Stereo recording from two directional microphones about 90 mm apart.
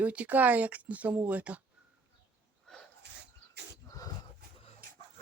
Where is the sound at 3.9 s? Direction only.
40° left (ahead or behind).